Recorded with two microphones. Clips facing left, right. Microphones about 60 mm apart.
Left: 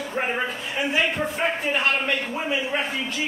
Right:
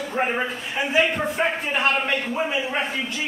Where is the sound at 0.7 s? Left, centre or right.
Centre.